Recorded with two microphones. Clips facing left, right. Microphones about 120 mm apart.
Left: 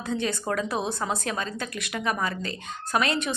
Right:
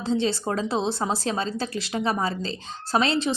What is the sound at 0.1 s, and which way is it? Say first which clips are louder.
A woman's voice: right 3 dB; 25° right (ahead or behind).